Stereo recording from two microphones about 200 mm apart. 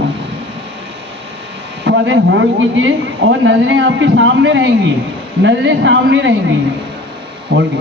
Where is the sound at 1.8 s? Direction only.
65° right (ahead or behind).